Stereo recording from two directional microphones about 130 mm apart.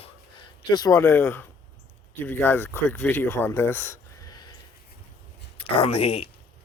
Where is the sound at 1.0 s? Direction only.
15° left (ahead or behind).